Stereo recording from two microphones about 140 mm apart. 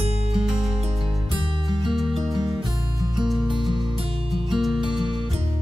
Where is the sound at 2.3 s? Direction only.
35° right (ahead or behind).